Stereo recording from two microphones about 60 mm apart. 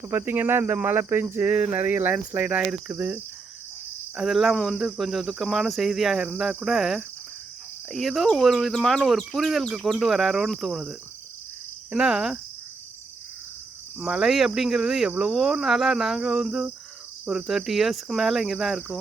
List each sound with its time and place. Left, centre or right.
0.1 s cricket: right
2.4 s cricket: right
4.1 s cricket: centre
4.5 s cricket: centre
4.9 s cricket: centre
11.9 s speech: centre
14.0 s speech: centre
14.3 s speech: centre
17.2 s cricket: centre